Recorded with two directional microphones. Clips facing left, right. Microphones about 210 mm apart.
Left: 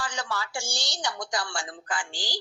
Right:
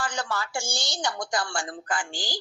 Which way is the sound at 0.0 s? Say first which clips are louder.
Right 2 dB; 50° right (ahead or behind).